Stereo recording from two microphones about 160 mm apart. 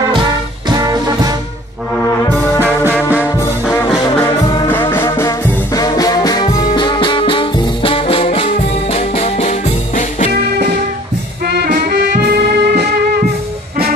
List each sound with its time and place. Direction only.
0.7 s music: 25° right (ahead or behind)
3.1 s brass instrument: 10° right (ahead or behind)
3.7 s music: 15° left (ahead or behind); by 10.3 s 45° left (ahead or behind)
11.4 s music: 85° right